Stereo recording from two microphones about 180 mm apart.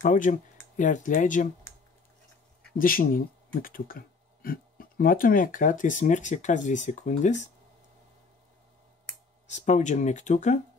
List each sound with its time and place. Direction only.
0.0 s speech: 45° left (ahead or behind)
2.8 s speech: 50° left (ahead or behind)
9.5 s speech: 40° left (ahead or behind)